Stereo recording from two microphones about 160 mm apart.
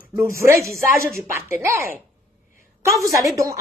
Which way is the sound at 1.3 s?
15° right (ahead or behind).